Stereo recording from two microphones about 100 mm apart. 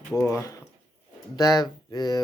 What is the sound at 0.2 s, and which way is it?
Speech, 30° left (ahead or behind).